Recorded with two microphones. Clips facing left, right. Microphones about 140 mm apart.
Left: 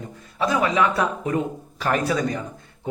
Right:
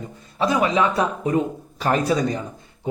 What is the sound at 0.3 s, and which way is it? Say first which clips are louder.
A man's voice: right 1 dB; 25° right (ahead or behind).